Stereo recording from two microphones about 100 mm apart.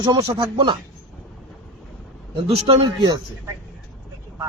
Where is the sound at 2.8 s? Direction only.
45° right (ahead or behind).